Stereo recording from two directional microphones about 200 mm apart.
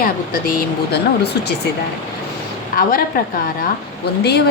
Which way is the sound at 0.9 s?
55° left (ahead or behind).